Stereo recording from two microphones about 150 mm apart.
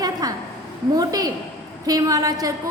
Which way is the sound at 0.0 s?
25° right (ahead or behind).